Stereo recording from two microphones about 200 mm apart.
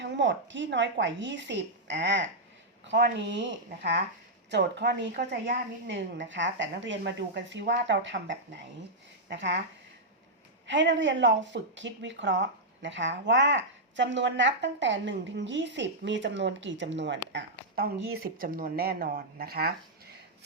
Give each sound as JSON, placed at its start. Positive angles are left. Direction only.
{"t": 0.0, "sound": "speech", "side_deg": -65}
{"t": 4.5, "sound": "speech", "side_deg": -60}
{"t": 10.7, "sound": "speech", "side_deg": -65}